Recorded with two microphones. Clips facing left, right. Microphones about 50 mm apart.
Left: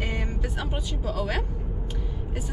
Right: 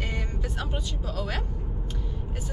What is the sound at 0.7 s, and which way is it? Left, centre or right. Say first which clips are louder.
Speech: left 3 dB; centre.